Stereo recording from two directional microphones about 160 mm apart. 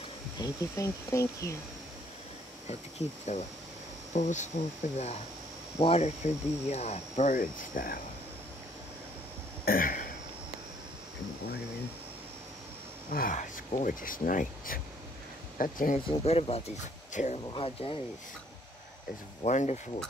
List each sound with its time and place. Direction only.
0.4 s speech: 20° left (ahead or behind)
3.0 s speech: 45° left (ahead or behind)
5.8 s speech: 40° left (ahead or behind); by 8.0 s 60° left (ahead or behind)
9.7 s speech: 60° left (ahead or behind)
13.1 s speech: 60° left (ahead or behind)
16.1 s speech: 40° left (ahead or behind)
17.5 s speech: 35° left (ahead or behind)
19.4 s speech: 50° left (ahead or behind)